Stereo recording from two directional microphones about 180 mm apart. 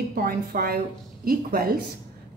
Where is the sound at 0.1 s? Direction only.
55° right (ahead or behind).